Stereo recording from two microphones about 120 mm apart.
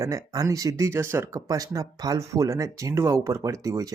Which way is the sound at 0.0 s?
30° right (ahead or behind).